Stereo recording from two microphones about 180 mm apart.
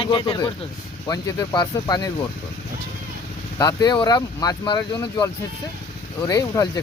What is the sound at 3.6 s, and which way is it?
Speech, 20° left (ahead or behind).